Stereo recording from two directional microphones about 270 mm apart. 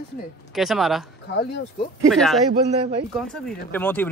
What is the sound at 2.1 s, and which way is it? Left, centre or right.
Speech, centre.